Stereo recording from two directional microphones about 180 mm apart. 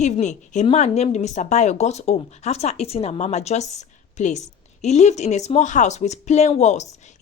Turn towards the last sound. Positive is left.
turn(degrees=40)  # may be behind; listen again after turning